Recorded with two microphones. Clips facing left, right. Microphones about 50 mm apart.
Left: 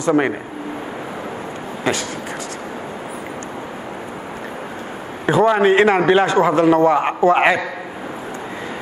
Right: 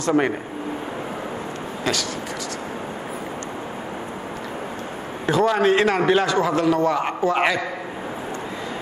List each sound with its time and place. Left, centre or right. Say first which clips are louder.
0.0 s speech: left 3 dB; centre
1.9 s a man's voice: left 4 dB; left
5.2 s a man's voice: left 4 dB; left